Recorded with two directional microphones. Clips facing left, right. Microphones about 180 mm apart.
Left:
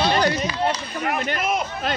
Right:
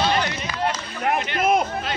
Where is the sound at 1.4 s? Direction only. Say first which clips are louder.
Right 4 dB; 50° right (ahead or behind).